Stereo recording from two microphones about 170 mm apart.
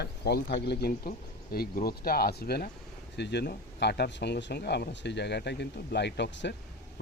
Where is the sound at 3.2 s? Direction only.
85° left.